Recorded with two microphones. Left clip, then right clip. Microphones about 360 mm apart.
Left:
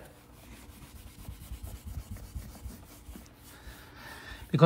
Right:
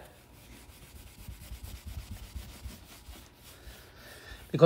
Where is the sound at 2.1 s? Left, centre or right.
Centre.